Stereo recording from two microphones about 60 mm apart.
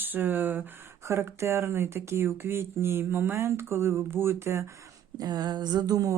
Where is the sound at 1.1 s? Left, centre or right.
Right.